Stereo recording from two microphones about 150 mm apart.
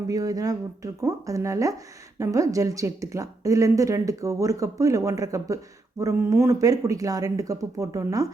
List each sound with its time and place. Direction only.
0.1 s speech: 25° right (ahead or behind)